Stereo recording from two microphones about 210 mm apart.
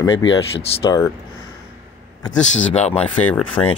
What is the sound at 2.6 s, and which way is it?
Speech, 30° left (ahead or behind).